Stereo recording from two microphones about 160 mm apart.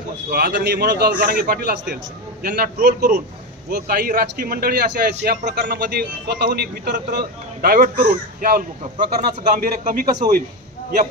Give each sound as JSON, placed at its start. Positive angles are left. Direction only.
{"t": 0.3, "sound": "a man's voice", "side_deg": -70}
{"t": 2.4, "sound": "a man's voice", "side_deg": -70}